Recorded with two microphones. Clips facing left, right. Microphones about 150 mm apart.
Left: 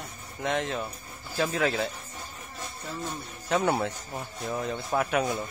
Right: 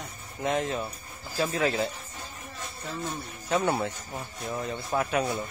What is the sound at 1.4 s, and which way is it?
Speech, 10° right (ahead or behind).